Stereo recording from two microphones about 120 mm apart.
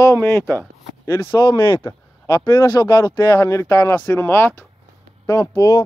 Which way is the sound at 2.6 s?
35° left (ahead or behind).